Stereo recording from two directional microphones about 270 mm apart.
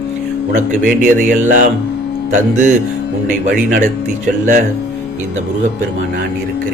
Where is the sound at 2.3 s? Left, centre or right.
Right.